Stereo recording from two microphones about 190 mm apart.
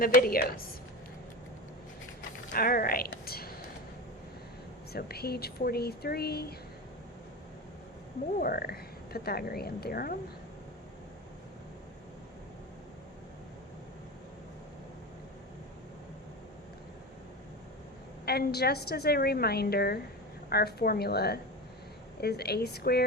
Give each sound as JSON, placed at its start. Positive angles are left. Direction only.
{"t": 0.0, "sound": "a woman's voice", "side_deg": 50}
{"t": 2.5, "sound": "a woman's voice", "side_deg": 50}
{"t": 4.9, "sound": "a woman's voice", "side_deg": 55}
{"t": 8.4, "sound": "a woman's voice", "side_deg": 50}
{"t": 18.3, "sound": "a woman's voice", "side_deg": 55}